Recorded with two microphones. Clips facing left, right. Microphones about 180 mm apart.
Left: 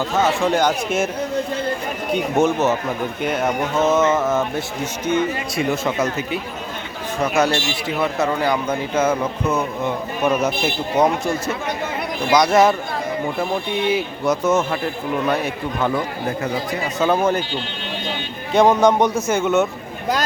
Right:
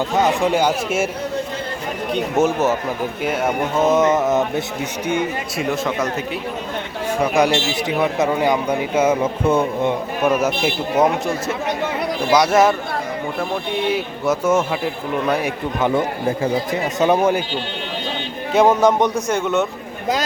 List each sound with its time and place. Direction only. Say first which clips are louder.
0.1 s a man's voice: right 1 dB; 15° right (ahead or behind)
2.1 s a man's voice: even; 10° right (ahead or behind)
5.5 s a man's voice: left 1 dB; centre (ahead or behind)
7.2 s a man's voice: right 1 dB; 15° right (ahead or behind)
9.2 s speech: right 4 dB; 30° right (ahead or behind)
10.2 s a man's voice: right 1 dB; 5° right (ahead or behind)
13.8 s a man's voice: left 1 dB; centre (ahead or behind)
15.4 s speech: right 2 dB; 20° right (ahead or behind)
18.5 s a man's voice: even; 5° right (ahead or behind)